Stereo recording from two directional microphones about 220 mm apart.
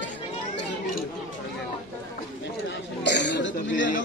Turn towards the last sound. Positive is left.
turn(degrees=55)  # may be behind; listen again after turning